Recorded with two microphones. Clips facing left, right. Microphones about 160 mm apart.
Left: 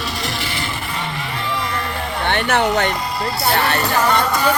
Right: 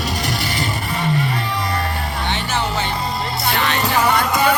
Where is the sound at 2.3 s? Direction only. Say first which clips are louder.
Left 7 dB; 60° left (ahead or behind).